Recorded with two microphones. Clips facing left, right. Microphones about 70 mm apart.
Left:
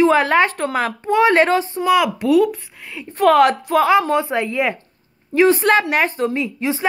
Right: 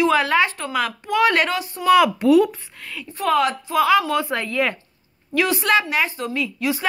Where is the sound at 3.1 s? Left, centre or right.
Left.